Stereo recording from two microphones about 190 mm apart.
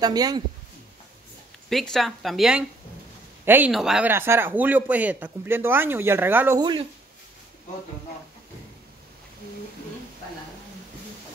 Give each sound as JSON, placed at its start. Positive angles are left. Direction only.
{"t": 0.0, "sound": "speech", "side_deg": -20}
{"t": 1.7, "sound": "a man's voice", "side_deg": 0}
{"t": 6.6, "sound": "speech", "side_deg": -25}